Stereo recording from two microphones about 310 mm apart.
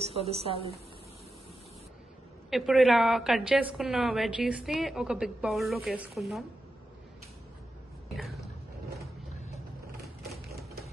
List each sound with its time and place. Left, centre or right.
0.0 s a woman's voice: centre
2.5 s a woman's voice: centre
8.2 s a sound: centre
10.2 s typewriter: centre